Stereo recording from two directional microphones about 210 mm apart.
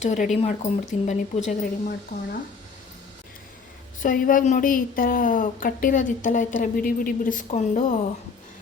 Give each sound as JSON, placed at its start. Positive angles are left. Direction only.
{"t": 0.0, "sound": "speech", "side_deg": 35}
{"t": 1.5, "sound": "speech", "side_deg": 45}
{"t": 4.0, "sound": "speech", "side_deg": 40}